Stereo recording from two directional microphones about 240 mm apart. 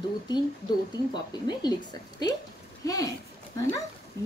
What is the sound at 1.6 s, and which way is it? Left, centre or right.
Speech, centre.